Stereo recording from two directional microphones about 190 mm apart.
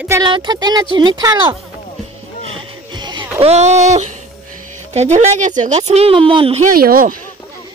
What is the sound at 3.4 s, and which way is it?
Speech, 35° right (ahead or behind).